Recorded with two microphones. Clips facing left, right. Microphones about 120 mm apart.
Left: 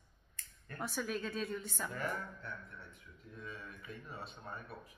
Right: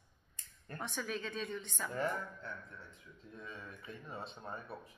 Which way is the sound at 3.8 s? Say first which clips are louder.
Right 1 dB; 25° right (ahead or behind).